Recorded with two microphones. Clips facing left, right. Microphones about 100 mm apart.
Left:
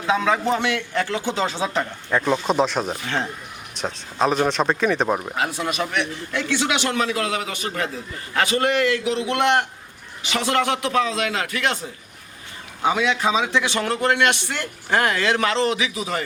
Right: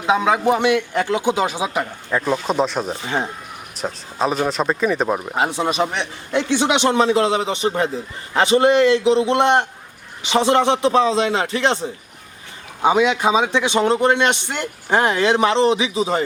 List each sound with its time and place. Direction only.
0.0 s a man's voice: 15° right (ahead or behind)
2.0 s speech: centre (ahead or behind)
5.3 s a man's voice: 25° right (ahead or behind)